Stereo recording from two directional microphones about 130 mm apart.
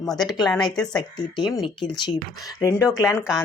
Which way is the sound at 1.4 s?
35° left (ahead or behind).